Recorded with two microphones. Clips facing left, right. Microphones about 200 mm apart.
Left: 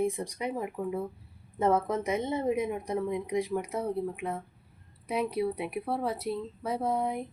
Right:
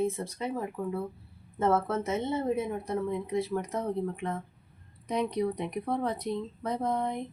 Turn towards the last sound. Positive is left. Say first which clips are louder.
# left 1 dB
turn(degrees=5)  # may be behind; listen again after turning